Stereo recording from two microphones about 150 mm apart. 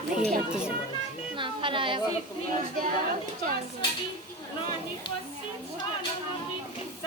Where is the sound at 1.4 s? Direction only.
35° right (ahead or behind).